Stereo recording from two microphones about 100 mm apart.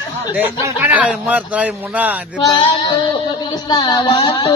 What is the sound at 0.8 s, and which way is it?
Speech, 15° right (ahead or behind).